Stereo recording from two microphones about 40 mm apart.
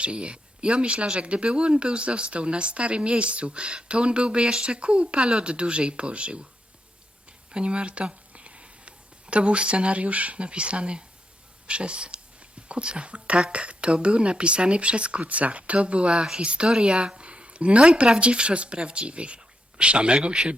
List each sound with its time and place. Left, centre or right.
0.0 s speech: right
7.5 s a sound: right
9.3 s speech: right